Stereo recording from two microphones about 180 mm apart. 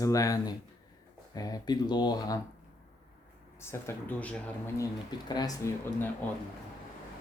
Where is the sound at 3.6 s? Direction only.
15° left (ahead or behind).